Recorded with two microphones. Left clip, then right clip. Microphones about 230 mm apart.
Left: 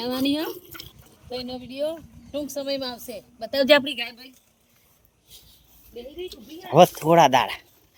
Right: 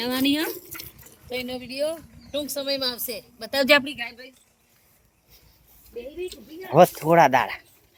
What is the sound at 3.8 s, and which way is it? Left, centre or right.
Speech, left.